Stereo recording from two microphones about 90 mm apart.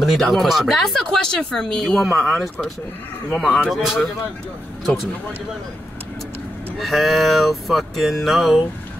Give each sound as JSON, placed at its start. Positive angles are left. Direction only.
{"t": 0.0, "sound": "speech", "side_deg": 0}
{"t": 6.8, "sound": "speech", "side_deg": 0}